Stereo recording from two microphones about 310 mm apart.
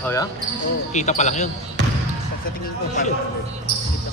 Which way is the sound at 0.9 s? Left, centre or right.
Left.